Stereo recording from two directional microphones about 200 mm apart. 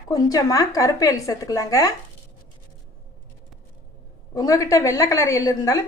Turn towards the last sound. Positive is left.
turn(degrees=15)  # may be behind; listen again after turning